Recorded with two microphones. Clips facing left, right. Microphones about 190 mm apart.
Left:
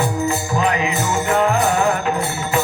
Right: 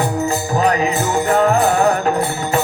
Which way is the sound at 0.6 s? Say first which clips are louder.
Right 4 dB; 40° right (ahead or behind).